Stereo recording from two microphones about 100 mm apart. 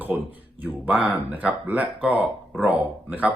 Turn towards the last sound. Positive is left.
turn(degrees=-15)  # may be behind; listen again after turning